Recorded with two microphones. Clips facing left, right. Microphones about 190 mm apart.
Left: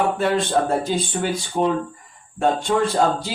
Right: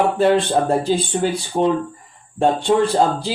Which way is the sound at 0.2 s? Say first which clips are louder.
Right 4 dB; 35° right (ahead or behind).